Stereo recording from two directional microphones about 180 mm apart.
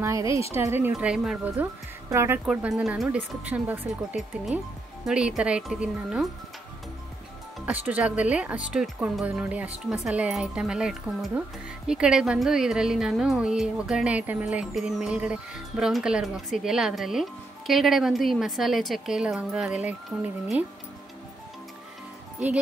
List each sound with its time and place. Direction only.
0.0 s a woman's voice: 15° right (ahead or behind)
7.6 s a woman's voice: 10° right (ahead or behind)